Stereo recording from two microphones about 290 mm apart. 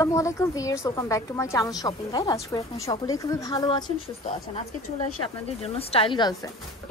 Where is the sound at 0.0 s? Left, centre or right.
Centre.